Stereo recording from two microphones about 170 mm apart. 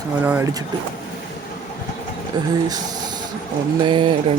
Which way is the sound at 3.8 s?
30° right (ahead or behind).